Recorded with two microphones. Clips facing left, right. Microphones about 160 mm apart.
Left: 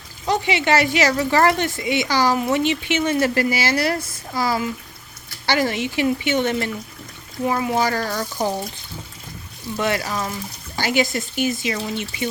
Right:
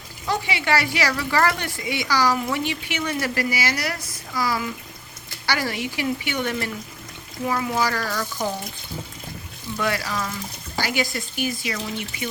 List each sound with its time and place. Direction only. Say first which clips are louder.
0.3 s speech: left 4 dB; 20° left (ahead or behind)
9.7 s speech: left 3 dB; 25° left (ahead or behind)